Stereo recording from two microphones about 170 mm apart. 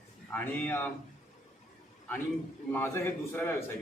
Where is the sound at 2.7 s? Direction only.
15° left (ahead or behind).